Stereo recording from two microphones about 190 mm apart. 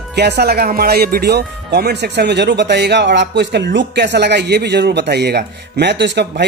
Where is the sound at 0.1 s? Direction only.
60° right (ahead or behind).